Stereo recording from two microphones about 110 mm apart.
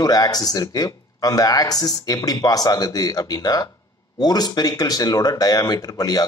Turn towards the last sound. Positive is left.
turn(degrees=35)  # may be behind; listen again after turning